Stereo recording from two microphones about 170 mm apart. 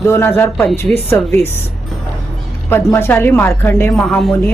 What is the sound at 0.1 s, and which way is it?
Speech, 15° left (ahead or behind).